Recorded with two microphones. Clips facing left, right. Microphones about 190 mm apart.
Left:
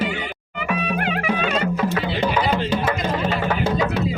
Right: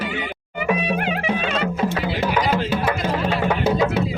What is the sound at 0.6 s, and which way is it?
Music, 25° right (ahead or behind).